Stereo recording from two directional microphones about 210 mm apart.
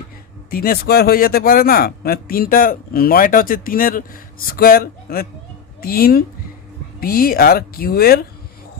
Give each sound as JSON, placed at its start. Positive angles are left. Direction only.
{"t": 0.5, "sound": "speech", "side_deg": 45}